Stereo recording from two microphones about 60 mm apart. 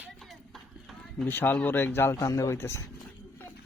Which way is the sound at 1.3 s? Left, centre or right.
Left.